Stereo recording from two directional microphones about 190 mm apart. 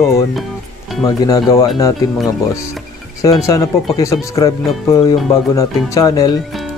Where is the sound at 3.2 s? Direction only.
15° left (ahead or behind).